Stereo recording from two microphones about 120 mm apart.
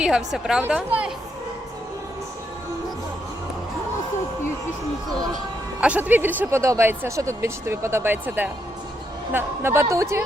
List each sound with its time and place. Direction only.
0.0 s a woman's voice: 5° right (ahead or behind)
5.8 s speech: 10° right (ahead or behind)